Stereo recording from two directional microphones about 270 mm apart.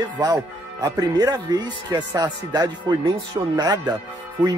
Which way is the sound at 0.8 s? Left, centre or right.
Centre.